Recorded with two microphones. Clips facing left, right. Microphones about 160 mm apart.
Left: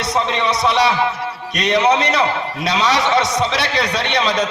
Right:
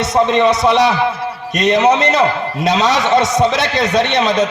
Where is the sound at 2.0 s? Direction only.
50° right (ahead or behind).